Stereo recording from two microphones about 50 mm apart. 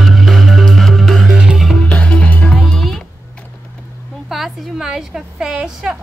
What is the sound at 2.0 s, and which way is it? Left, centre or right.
Music, left.